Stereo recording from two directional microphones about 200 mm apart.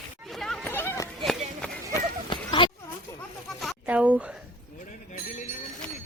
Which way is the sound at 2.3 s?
25° left (ahead or behind).